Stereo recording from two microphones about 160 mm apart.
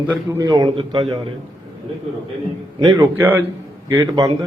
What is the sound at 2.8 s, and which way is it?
Speech, 25° right (ahead or behind).